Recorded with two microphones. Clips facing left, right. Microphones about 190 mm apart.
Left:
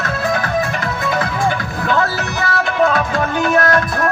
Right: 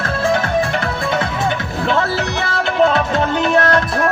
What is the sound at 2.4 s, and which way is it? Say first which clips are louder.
Music: even; 25° right (ahead or behind).